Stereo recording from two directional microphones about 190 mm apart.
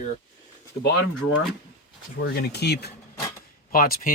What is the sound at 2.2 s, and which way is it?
Speech, 60° left (ahead or behind).